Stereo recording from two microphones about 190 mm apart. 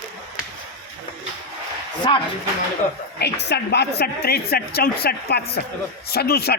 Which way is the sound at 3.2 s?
60° left (ahead or behind).